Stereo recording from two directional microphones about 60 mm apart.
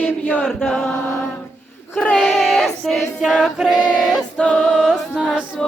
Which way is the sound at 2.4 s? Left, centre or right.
Centre.